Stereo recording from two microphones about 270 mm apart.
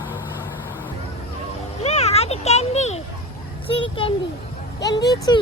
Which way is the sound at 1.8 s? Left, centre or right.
Left.